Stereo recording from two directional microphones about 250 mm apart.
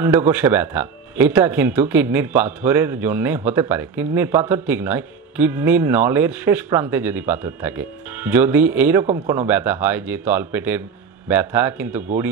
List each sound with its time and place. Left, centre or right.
0.0 s speech: centre
9.0 s a man's voice: right
9.5 s speech: centre